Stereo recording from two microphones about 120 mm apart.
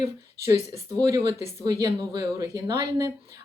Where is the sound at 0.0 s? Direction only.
25° right (ahead or behind).